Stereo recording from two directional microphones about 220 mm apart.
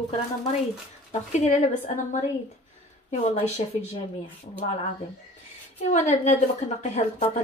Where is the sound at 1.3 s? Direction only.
30° left (ahead or behind).